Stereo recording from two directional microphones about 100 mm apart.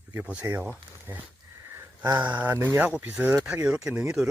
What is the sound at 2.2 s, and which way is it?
Speech, 15° right (ahead or behind).